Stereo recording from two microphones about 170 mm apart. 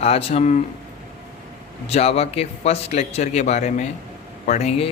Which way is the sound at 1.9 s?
35° left (ahead or behind).